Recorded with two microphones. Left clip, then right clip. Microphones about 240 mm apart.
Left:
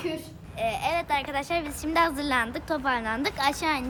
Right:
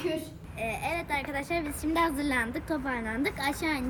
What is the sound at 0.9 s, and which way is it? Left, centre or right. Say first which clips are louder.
A woman's voice: left 4 dB; centre.